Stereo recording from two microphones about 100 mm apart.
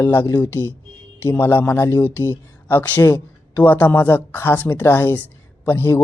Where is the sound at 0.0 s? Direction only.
20° left (ahead or behind).